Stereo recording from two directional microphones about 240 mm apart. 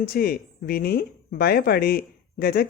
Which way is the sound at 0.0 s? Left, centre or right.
Left.